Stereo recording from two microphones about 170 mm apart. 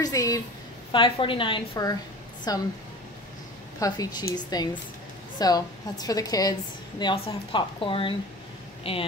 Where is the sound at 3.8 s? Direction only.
20° left (ahead or behind).